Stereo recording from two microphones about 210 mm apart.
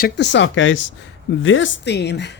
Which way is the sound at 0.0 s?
55° left (ahead or behind).